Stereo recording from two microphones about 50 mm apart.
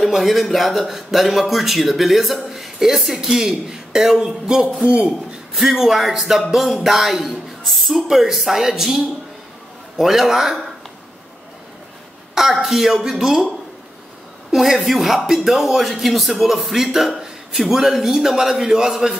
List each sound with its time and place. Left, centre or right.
0.0 s a man's voice: centre; by 5.1 s right
5.5 s a man's voice: centre
12.4 s a man's voice: centre
14.5 s a man's voice: centre